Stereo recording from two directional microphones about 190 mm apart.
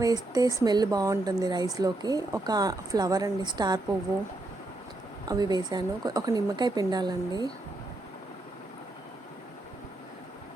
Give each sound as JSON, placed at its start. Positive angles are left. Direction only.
{"t": 0.0, "sound": "speech", "side_deg": -20}
{"t": 5.3, "sound": "speech", "side_deg": -20}